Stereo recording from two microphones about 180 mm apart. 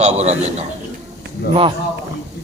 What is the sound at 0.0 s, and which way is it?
Speech, 40° right (ahead or behind).